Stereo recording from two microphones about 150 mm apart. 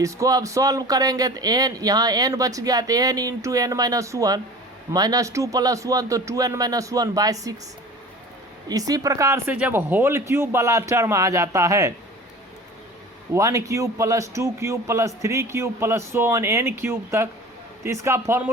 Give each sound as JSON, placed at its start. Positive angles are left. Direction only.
{"t": 0.0, "sound": "speech", "side_deg": -25}
{"t": 8.6, "sound": "speech", "side_deg": -25}
{"t": 9.5, "sound": "speech", "side_deg": -10}
{"t": 13.3, "sound": "speech", "side_deg": -20}